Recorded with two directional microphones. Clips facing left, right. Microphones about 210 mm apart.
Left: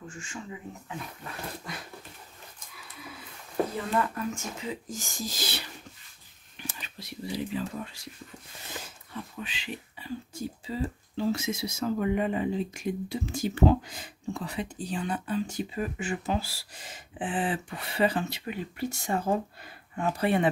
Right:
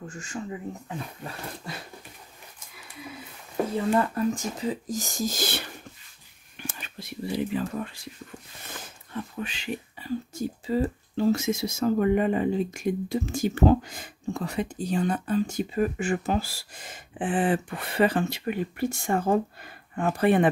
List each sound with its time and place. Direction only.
0.1 s speech: 40° right (ahead or behind)
4.0 s speech: 35° right (ahead or behind); by 5.7 s 50° right (ahead or behind)
6.7 s a sound: 50° right (ahead or behind)
9.1 s speech: 50° right (ahead or behind)